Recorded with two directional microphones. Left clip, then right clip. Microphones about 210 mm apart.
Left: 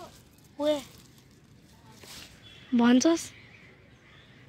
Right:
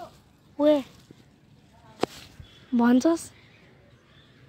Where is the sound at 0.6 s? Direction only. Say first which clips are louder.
Right 7 dB; 35° right (ahead or behind).